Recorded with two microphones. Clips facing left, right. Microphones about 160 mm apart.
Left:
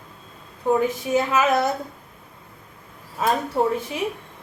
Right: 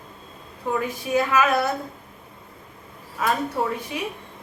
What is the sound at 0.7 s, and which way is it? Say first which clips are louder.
A woman's voice: left 4 dB; 25° left (ahead or behind).